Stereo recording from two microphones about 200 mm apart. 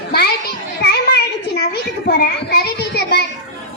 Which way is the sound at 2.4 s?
55° left (ahead or behind).